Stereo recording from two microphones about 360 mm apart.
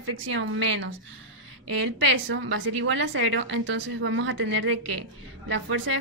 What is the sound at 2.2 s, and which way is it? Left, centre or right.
A woman's voice, right.